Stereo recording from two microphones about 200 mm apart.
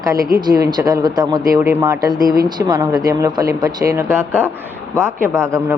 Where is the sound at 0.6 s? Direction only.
20° right (ahead or behind).